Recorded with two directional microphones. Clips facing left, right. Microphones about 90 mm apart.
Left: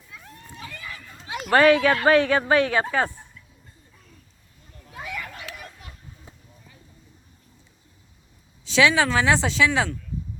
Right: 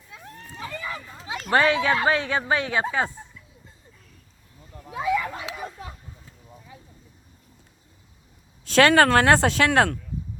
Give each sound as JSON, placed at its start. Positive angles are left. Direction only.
{"t": 0.6, "sound": "run", "side_deg": -35}
{"t": 1.5, "sound": "speech", "side_deg": -25}
{"t": 4.9, "sound": "a sound", "side_deg": -25}
{"t": 8.6, "sound": "speech", "side_deg": -50}